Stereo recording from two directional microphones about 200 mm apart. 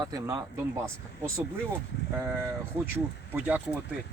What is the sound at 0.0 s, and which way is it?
Speech, 15° right (ahead or behind).